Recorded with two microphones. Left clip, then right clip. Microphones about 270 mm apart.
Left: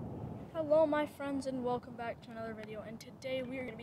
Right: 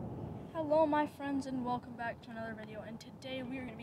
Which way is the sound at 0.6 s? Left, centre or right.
Centre.